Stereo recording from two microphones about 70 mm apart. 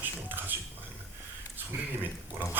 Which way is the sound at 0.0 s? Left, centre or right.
Right.